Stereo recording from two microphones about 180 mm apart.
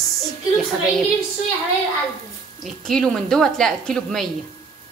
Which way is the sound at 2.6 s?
Centre (ahead or behind).